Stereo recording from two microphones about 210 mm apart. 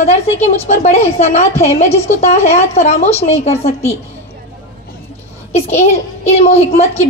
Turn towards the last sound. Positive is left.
turn(degrees=30)  # may be behind; listen again after turning